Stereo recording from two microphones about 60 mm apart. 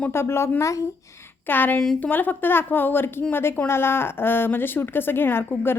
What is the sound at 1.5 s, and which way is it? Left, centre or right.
A woman's voice, left.